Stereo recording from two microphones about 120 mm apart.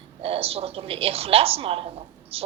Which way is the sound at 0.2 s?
55° right (ahead or behind).